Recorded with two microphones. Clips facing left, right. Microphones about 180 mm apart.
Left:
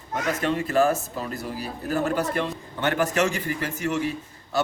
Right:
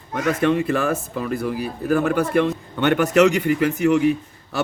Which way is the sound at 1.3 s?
60° right (ahead or behind).